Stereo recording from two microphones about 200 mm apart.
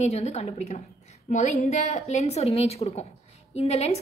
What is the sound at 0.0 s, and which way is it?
A woman's voice, 30° left (ahead or behind).